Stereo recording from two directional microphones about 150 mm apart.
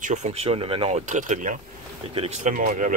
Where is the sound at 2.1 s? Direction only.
40° right (ahead or behind).